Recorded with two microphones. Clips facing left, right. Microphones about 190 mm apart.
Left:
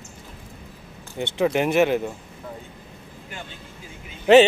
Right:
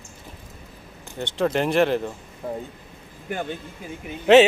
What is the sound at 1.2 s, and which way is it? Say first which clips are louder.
Speech: left 1 dB; 10° left (ahead or behind).